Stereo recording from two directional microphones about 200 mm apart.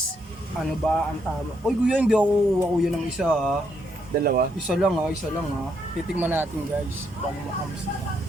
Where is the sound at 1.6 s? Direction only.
5° right (ahead or behind).